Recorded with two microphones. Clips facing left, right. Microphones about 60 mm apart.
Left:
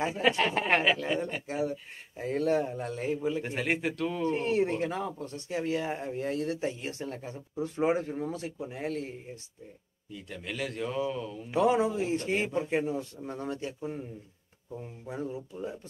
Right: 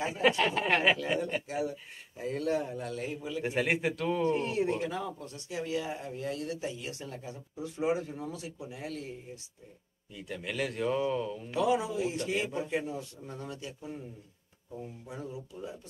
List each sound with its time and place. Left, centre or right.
0.3 s speech: left
3.4 s a man's voice: centre
4.3 s speech: left
10.1 s a man's voice: centre
11.5 s speech: left